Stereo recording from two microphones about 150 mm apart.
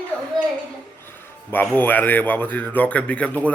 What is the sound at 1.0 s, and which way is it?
Speech, 15° left (ahead or behind).